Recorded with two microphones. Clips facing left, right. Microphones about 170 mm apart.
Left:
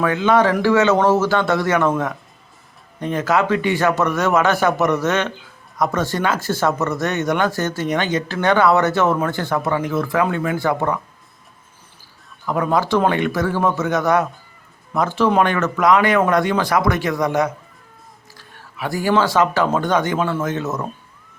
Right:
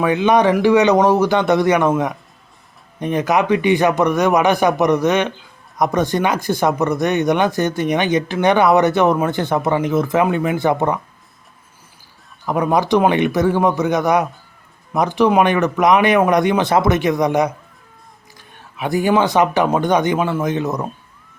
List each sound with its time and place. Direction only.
0.0 s speech: 20° right (ahead or behind)
12.5 s speech: 20° right (ahead or behind)